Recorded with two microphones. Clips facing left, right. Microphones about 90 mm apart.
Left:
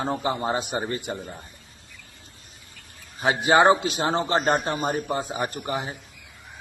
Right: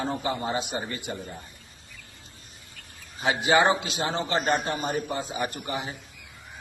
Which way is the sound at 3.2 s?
40° left (ahead or behind).